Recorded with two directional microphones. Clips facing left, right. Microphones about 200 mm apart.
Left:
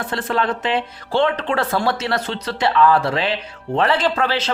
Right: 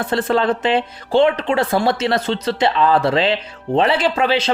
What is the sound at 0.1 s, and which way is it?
Speech, 30° right (ahead or behind).